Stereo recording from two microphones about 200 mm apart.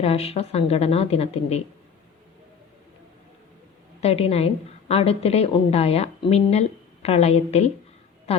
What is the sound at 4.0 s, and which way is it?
A woman's voice, 30° left (ahead or behind).